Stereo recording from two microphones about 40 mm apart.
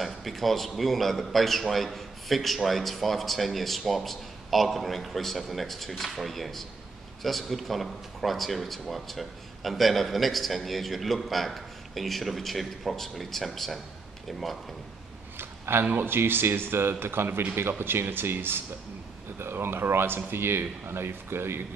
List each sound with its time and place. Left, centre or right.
0.0 s a man's voice: centre
15.3 s a man's voice: right
17.0 s speech: right
19.3 s speech: right